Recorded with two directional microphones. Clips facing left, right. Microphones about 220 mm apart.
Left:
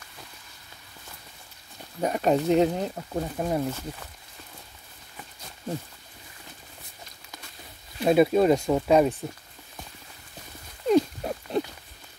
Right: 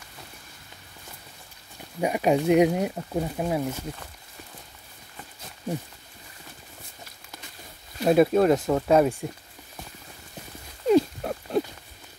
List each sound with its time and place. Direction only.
2.0 s speech: 10° right (ahead or behind)
8.0 s speech: centre (ahead or behind)
10.9 s a sound: 5° right (ahead or behind)